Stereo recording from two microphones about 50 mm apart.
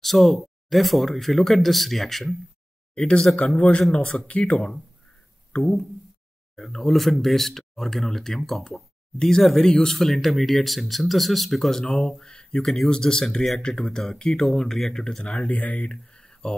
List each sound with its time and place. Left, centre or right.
0.0 s speech: centre
2.9 s speech: centre
6.5 s speech: centre
15.4 s speech: left